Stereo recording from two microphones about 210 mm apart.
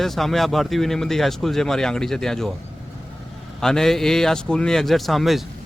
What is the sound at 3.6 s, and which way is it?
Speech, centre (ahead or behind).